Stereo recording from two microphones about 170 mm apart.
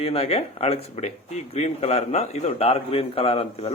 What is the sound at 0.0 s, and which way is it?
Speech, 35° left (ahead or behind).